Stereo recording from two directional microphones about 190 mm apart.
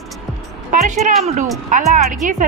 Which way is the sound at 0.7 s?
45° right (ahead or behind).